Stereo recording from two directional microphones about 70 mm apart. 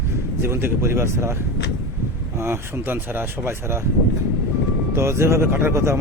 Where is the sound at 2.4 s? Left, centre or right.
Right.